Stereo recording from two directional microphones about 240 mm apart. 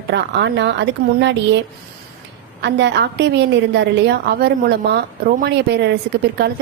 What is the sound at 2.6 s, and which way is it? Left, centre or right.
A woman's voice, right.